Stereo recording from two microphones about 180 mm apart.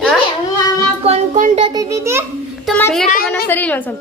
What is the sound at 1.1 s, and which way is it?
Music, 45° right (ahead or behind).